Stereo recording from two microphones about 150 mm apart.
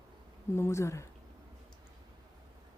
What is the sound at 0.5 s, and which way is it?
Speech, 20° left (ahead or behind).